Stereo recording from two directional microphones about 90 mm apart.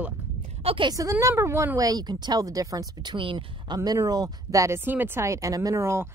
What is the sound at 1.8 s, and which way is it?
Speech, 45° right (ahead or behind).